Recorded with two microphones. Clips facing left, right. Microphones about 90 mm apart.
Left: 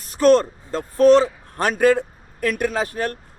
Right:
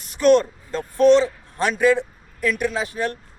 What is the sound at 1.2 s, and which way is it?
A man's voice, 55° left (ahead or behind).